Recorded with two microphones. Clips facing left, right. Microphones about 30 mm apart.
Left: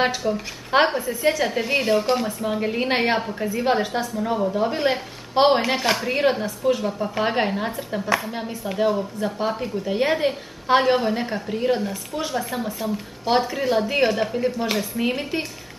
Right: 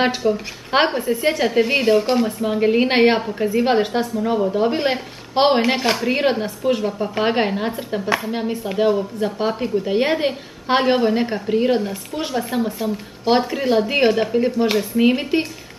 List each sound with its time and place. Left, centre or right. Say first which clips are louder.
0.0 s a woman's voice: right 3 dB; centre
2.6 s a woman's voice: right 8 dB; centre
4.2 s a woman's voice: right 3 dB; centre
4.6 s a woman's voice: right 3 dB; centre